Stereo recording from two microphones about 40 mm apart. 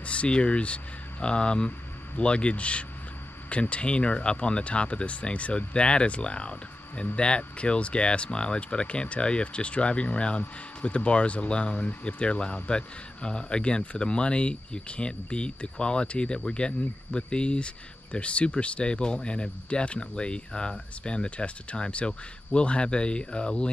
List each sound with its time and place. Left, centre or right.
0.0 s a man's voice: left